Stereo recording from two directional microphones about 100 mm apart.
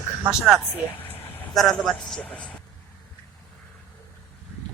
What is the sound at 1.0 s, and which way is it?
Vehicle, 20° left (ahead or behind).